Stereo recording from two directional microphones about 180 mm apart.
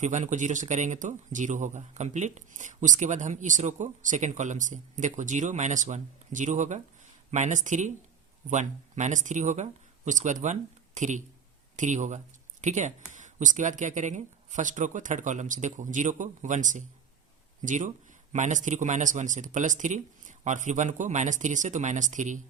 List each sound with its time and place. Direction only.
0.0 s speech: 40° right (ahead or behind)